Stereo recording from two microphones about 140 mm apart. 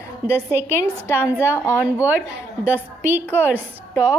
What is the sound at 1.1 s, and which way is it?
Speech, 20° left (ahead or behind).